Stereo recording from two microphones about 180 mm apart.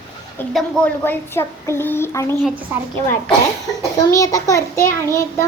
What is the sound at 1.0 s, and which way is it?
A child's voice, 10° left (ahead or behind).